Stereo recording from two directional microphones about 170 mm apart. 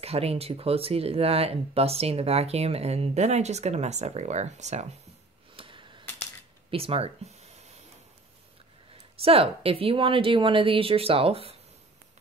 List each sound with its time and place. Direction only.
0.0 s speech: 35° right (ahead or behind)
5.6 s a sound: 30° right (ahead or behind)
9.2 s speech: 35° right (ahead or behind)